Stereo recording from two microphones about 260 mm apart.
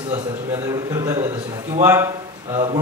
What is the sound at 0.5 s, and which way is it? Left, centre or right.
A man's voice, centre.